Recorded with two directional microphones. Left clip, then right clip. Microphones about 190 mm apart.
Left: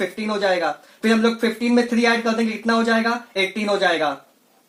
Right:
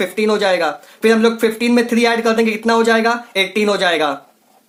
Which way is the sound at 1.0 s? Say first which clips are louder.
Right 6 dB; 30° right (ahead or behind).